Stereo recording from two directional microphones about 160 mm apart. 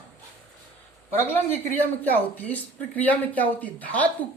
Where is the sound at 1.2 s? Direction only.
10° left (ahead or behind).